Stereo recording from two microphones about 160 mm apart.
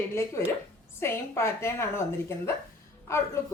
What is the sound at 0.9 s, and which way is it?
Speech, 15° left (ahead or behind).